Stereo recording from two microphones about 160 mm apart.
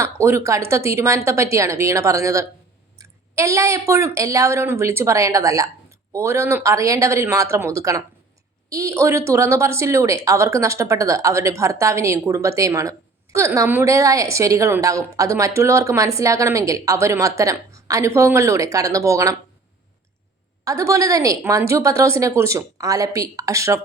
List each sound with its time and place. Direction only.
0.0 s a woman's voice: 15° right (ahead or behind)
20.7 s a woman's voice: 20° right (ahead or behind)